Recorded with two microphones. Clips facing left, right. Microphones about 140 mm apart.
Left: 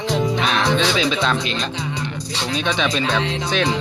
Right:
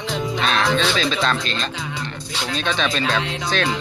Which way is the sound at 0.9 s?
15° left (ahead or behind).